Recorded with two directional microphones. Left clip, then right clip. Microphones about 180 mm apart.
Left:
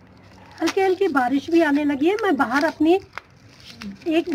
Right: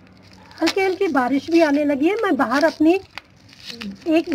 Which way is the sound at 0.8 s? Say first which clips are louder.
Left 2 dB; 55° right (ahead or behind).